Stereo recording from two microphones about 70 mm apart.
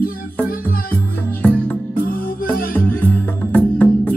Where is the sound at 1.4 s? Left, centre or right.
Centre.